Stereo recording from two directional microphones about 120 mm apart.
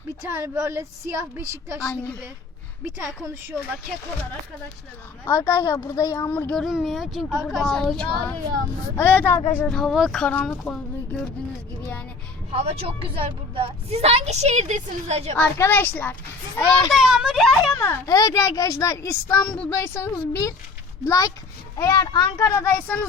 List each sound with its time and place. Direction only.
0.2 s a woman's voice: 20° right (ahead or behind)
5.3 s a child's voice: 30° left (ahead or behind)
6.3 s speech: 10° left (ahead or behind)
6.7 s speech: centre (ahead or behind); by 9.7 s 15° left (ahead or behind)
9.7 s speech: centre (ahead or behind)
12.5 s a woman's voice: 60° right (ahead or behind)
15.5 s speech: 20° left (ahead or behind)
16.9 s speech: 5° right (ahead or behind)
17.7 s a child's voice: 25° left (ahead or behind)